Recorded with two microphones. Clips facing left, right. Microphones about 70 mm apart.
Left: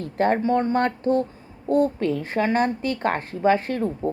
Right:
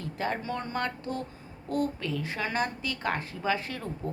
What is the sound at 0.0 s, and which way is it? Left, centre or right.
A woman's voice, left.